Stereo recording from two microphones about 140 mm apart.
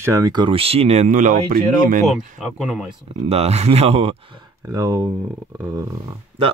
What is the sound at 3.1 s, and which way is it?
Speech, 45° right (ahead or behind).